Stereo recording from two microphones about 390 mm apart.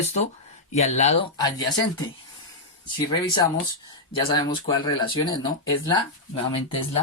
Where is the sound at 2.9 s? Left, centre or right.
Centre.